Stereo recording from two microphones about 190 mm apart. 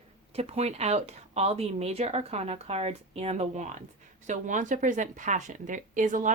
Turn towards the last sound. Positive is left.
turn(degrees=-40)  # may be behind; listen again after turning